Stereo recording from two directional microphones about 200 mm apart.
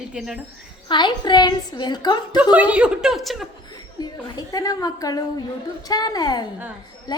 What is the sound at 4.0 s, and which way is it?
A woman's voice, 20° left (ahead or behind).